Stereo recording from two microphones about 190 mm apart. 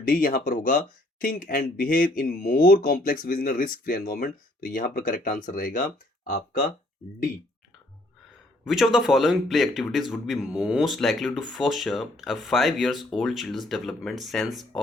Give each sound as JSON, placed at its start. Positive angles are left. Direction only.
{"t": 0.1, "sound": "speech", "side_deg": 50}
{"t": 8.6, "sound": "speech", "side_deg": 0}